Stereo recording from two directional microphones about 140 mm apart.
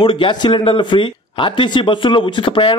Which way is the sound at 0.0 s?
40° left (ahead or behind).